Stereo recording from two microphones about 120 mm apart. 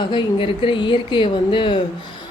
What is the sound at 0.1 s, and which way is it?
Speech, 45° left (ahead or behind).